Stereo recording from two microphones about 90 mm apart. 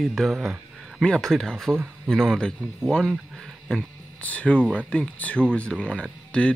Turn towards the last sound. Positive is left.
turn(degrees=10)  # may be behind; listen again after turning